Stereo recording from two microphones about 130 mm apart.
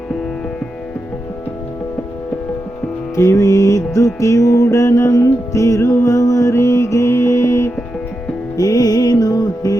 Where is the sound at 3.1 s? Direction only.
25° left (ahead or behind).